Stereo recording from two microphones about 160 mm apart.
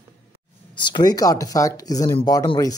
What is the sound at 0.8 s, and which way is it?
Speech, 25° left (ahead or behind).